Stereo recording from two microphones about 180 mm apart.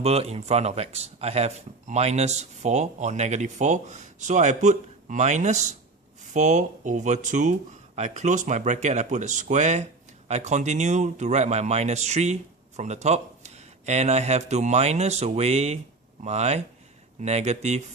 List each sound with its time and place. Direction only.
0.0 s speech: 35° right (ahead or behind)